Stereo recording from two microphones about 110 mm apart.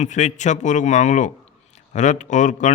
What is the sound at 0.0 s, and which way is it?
A man's voice, 90° left.